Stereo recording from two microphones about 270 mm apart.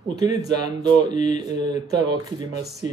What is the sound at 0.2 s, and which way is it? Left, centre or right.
Speech, centre.